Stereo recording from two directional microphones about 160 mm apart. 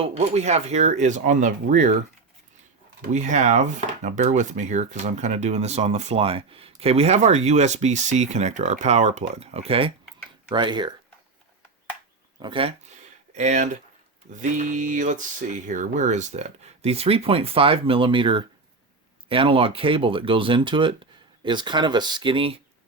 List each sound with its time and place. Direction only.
0.0 s speech: 45° right (ahead or behind)
3.1 s speech: 45° right (ahead or behind); by 10.9 s 30° right (ahead or behind)
12.4 s speech: 30° right (ahead or behind)
13.3 s speech: 45° right (ahead or behind)